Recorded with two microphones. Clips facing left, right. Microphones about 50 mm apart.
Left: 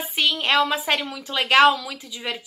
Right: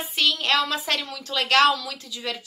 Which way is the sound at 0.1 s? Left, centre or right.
Centre.